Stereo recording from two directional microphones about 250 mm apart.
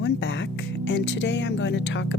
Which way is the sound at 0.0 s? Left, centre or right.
Left.